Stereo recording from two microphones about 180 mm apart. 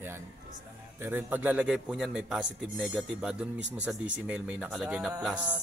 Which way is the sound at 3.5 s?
80° right.